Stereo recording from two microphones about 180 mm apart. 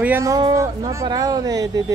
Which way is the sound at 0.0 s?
15° right (ahead or behind).